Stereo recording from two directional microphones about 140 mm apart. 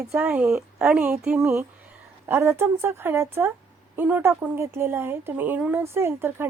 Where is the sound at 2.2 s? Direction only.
20° right (ahead or behind).